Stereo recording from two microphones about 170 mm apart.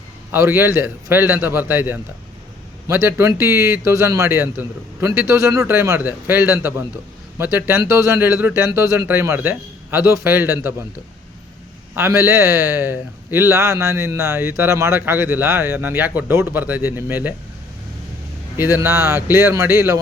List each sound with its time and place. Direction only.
0.3 s a man's voice: 15° right (ahead or behind)
11.9 s a man's voice: 15° right (ahead or behind)
18.5 s a man's voice: 15° right (ahead or behind)